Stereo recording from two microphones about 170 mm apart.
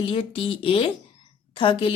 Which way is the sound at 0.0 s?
30° left (ahead or behind).